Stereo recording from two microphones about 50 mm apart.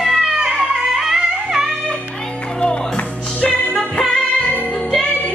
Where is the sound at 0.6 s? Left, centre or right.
Centre.